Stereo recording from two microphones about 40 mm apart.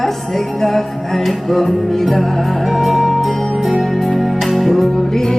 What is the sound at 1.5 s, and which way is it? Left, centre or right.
Music, centre.